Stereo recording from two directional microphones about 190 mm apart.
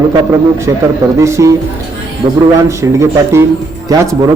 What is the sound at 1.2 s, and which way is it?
Speech, 15° right (ahead or behind).